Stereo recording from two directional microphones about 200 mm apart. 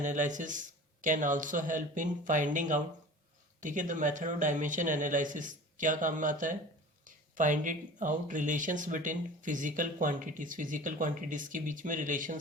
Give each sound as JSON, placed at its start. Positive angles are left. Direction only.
{"t": 0.0, "sound": "speech", "side_deg": -35}